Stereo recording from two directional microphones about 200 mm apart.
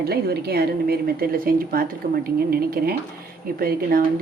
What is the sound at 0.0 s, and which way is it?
A woman's voice, 50° right (ahead or behind).